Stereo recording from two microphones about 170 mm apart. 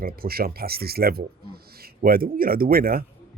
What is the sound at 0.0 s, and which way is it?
Speech, 60° right (ahead or behind).